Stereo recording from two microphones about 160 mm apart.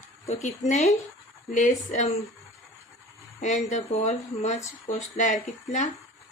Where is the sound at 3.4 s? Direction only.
45° left (ahead or behind).